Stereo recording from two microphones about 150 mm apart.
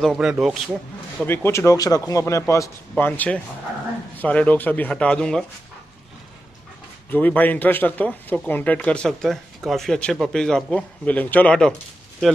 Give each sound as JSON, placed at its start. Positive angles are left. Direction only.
{"t": 0.0, "sound": "speech", "side_deg": -5}
{"t": 1.2, "sound": "speech", "side_deg": 15}
{"t": 7.1, "sound": "speech", "side_deg": 10}